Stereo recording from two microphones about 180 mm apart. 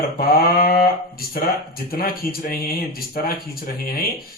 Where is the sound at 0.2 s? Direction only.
55° left (ahead or behind).